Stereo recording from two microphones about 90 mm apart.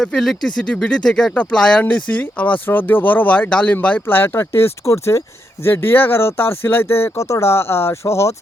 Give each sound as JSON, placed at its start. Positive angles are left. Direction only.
{"t": 0.0, "sound": "speech", "side_deg": 5}